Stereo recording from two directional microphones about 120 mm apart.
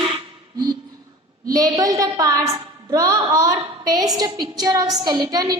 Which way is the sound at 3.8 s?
30° right (ahead or behind).